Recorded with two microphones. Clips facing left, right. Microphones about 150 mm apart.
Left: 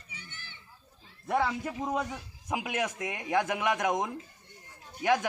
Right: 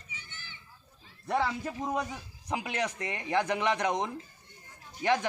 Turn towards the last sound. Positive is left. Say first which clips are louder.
# left 1 dB
turn(degrees=5)  # may be behind; listen again after turning